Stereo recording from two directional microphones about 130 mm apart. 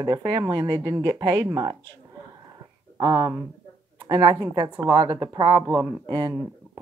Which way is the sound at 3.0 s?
30° right (ahead or behind).